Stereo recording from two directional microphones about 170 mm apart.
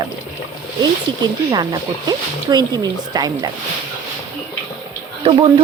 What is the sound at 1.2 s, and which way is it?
Speech, 25° right (ahead or behind).